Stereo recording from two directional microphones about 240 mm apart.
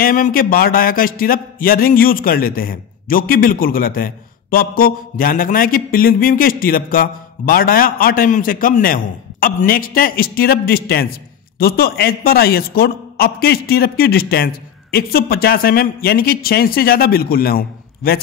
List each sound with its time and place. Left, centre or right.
0.0 s speech: left